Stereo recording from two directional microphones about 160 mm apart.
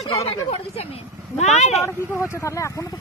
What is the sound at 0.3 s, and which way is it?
Speech, 35° left (ahead or behind).